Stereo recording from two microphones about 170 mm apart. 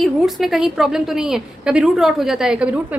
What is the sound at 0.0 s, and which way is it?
A woman's voice, centre (ahead or behind).